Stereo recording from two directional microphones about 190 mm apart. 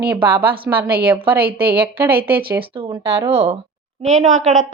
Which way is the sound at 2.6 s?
30° right (ahead or behind).